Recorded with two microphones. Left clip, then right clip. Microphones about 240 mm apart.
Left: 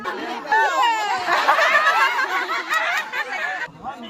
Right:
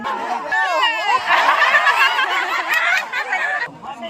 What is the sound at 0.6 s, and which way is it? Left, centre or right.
Baby cry, left.